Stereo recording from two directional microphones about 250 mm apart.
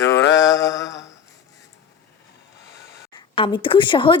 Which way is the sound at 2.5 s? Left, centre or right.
Left.